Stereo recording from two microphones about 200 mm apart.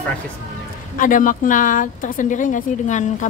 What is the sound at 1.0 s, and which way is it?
Speech, 40° left (ahead or behind).